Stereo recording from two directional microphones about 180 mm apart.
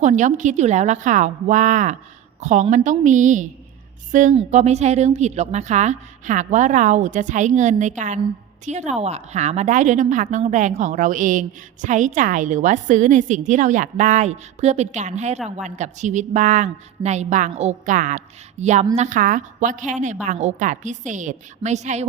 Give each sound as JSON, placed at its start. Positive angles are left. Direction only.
{"t": 0.0, "sound": "a woman's voice", "side_deg": -40}